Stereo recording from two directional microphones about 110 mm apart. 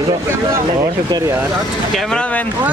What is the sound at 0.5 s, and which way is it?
Speech, 35° right (ahead or behind).